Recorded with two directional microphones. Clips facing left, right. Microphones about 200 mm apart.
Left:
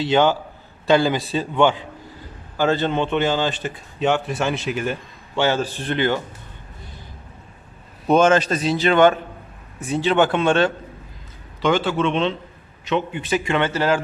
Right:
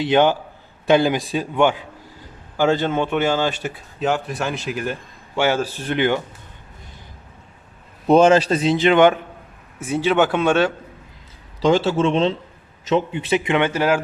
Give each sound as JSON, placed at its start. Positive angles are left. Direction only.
{"t": 0.0, "sound": "a man's voice", "side_deg": -15}
{"t": 8.0, "sound": "a man's voice", "side_deg": -30}
{"t": 11.6, "sound": "a man's voice", "side_deg": -35}
{"t": 13.1, "sound": "a man's voice", "side_deg": -20}